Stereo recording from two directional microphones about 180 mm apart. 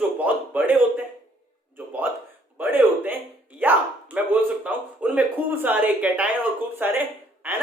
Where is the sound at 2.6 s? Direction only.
10° right (ahead or behind).